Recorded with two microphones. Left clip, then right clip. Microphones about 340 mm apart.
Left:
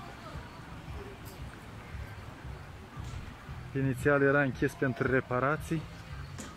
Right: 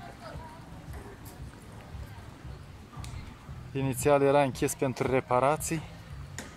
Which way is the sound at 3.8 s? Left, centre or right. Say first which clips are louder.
Right 3 dB; centre.